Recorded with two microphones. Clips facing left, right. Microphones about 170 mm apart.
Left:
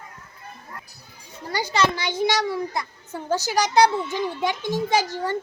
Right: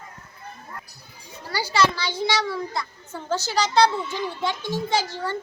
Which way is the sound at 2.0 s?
20° left (ahead or behind).